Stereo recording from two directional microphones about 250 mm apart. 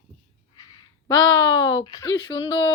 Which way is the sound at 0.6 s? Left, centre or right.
Centre.